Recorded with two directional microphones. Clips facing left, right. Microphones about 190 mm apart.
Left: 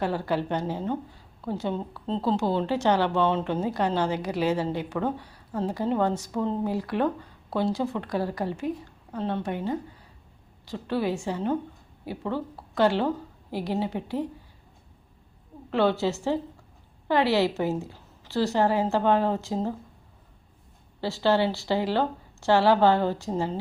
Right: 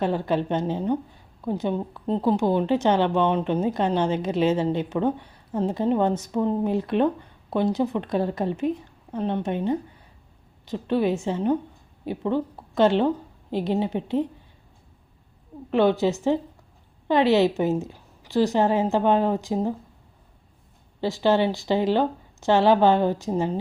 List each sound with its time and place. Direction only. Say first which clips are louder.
0.0 s a woman's voice: right 3 dB; 20° right (ahead or behind)
15.7 s a woman's voice: right 4 dB; 15° right (ahead or behind)
21.0 s a woman's voice: right 2 dB; 15° right (ahead or behind)